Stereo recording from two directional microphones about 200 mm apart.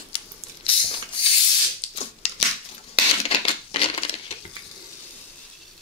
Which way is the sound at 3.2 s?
30° left (ahead or behind).